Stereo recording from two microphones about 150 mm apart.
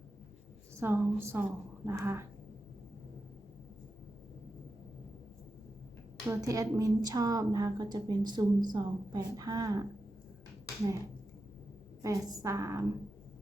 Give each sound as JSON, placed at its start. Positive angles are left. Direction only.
{"t": 0.8, "sound": "a woman's voice", "side_deg": -15}
{"t": 6.2, "sound": "a woman's voice", "side_deg": -20}
{"t": 12.0, "sound": "a woman's voice", "side_deg": -20}